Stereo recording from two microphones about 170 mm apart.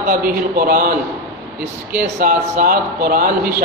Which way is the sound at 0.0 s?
55° right (ahead or behind).